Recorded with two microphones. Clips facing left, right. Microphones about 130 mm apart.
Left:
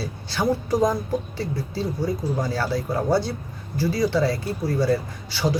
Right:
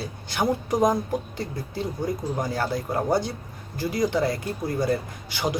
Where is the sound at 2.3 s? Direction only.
20° right (ahead or behind).